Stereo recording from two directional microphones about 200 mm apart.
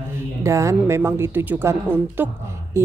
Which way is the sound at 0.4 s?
15° right (ahead or behind).